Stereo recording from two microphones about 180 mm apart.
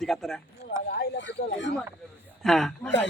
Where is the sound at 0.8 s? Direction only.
70° left (ahead or behind).